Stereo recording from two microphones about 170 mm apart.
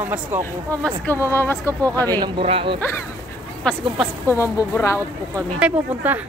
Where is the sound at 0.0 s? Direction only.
10° right (ahead or behind).